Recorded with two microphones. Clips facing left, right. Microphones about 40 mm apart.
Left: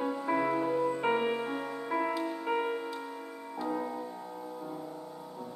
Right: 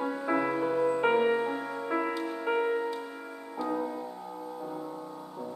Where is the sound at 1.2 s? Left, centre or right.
Centre.